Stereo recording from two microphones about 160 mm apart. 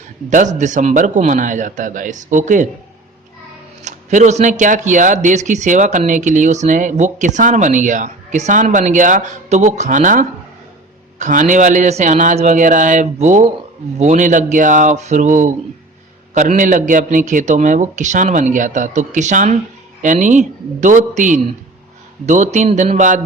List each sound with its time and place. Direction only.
0.3 s speech: 50° right (ahead or behind)
3.8 s speech: 50° right (ahead or behind)